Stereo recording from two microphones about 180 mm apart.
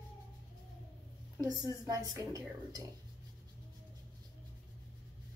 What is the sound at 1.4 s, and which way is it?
A woman's voice, 20° right (ahead or behind).